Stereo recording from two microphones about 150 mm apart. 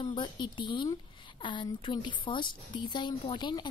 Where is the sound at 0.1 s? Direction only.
30° left (ahead or behind).